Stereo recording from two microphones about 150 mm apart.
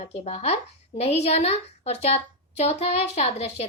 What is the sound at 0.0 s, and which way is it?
A woman's voice, 45° left (ahead or behind).